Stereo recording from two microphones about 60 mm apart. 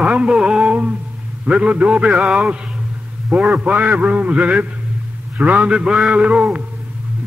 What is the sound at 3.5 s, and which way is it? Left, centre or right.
A man's voice, right.